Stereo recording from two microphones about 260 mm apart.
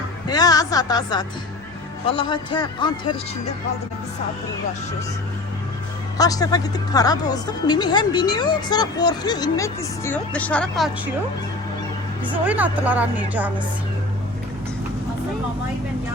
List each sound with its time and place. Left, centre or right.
0.3 s speech: centre
6.1 s speech: centre
12.3 s speech: centre